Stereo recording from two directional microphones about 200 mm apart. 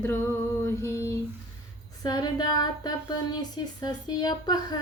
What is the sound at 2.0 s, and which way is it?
Speech, 20° left (ahead or behind).